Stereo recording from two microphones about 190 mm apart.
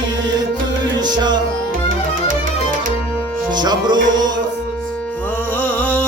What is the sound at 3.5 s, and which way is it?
Music, 20° right (ahead or behind).